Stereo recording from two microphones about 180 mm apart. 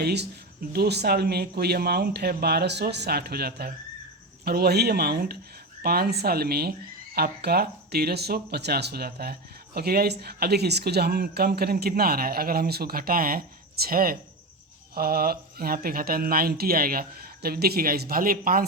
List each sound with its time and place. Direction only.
0.0 s speech: 65° right (ahead or behind)